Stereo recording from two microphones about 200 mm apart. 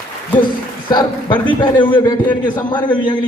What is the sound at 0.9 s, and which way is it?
Speech, 20° left (ahead or behind).